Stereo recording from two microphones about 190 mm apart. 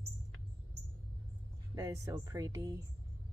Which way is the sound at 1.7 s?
15° right (ahead or behind).